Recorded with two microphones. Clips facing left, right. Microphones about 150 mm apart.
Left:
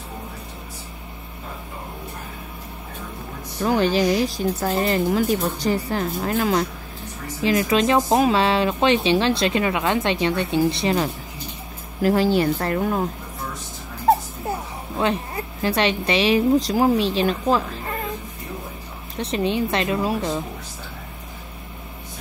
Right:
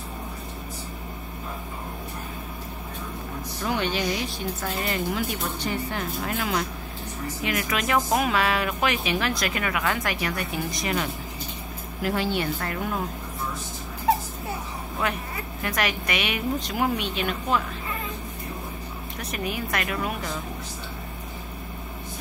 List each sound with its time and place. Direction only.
3.6 s speech: 35° left (ahead or behind)
15.0 s speech: 30° left (ahead or behind)
19.1 s speech: 25° left (ahead or behind)